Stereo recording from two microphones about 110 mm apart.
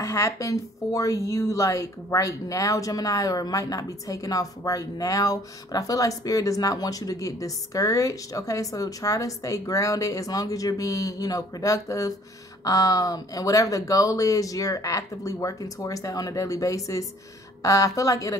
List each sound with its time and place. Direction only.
0.0 s speech: 30° left (ahead or behind)